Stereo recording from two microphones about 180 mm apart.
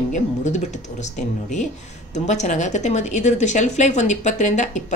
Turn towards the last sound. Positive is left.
turn(degrees=40)  # may be behind; listen again after turning